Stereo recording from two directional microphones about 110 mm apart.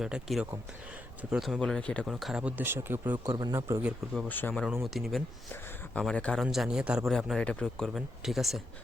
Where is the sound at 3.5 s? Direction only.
25° right (ahead or behind).